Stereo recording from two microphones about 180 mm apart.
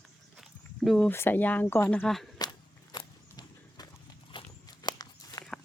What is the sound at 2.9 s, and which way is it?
Walk, 25° left (ahead or behind).